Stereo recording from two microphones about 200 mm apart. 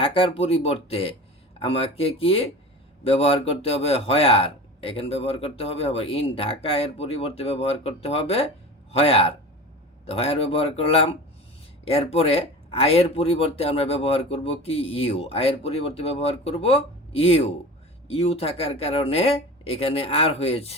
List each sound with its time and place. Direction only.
0.0 s speech: 25° left (ahead or behind)